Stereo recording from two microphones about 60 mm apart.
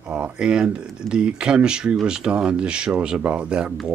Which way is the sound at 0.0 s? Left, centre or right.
Centre.